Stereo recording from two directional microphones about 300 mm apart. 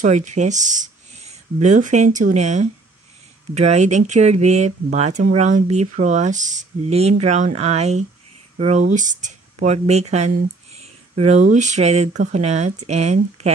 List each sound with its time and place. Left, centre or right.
0.0 s speech: right